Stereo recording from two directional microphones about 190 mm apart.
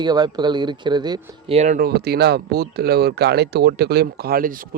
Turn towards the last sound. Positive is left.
turn(degrees=-45)  # may be behind; listen again after turning